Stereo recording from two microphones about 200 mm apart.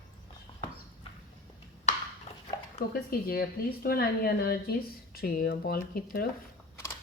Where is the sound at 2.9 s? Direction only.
50° left (ahead or behind).